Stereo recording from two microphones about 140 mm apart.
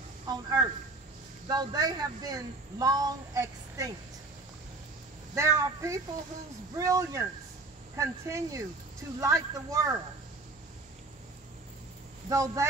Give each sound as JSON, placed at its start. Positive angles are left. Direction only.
{"t": 0.3, "sound": "a woman's voice", "side_deg": -30}
{"t": 5.3, "sound": "a woman's voice", "side_deg": -20}
{"t": 12.3, "sound": "a woman's voice", "side_deg": -25}